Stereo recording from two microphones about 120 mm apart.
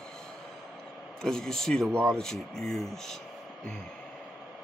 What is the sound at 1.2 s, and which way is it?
Speech, 5° left (ahead or behind).